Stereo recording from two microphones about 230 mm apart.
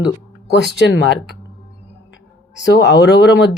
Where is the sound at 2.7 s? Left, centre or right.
Left.